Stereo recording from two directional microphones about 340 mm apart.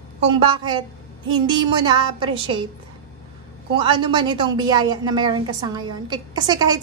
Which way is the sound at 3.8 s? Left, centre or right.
Centre.